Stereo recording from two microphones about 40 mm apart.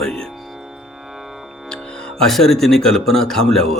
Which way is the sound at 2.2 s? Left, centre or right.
Centre.